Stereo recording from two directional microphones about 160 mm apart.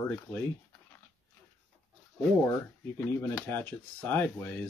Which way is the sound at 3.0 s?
10° left (ahead or behind).